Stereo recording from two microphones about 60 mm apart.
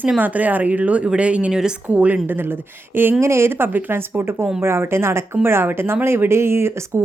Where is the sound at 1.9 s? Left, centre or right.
Right.